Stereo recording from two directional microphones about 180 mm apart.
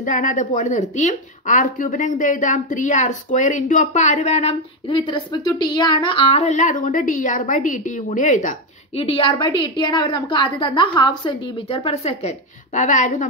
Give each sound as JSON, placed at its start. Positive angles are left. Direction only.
{"t": 0.0, "sound": "a woman's voice", "side_deg": 45}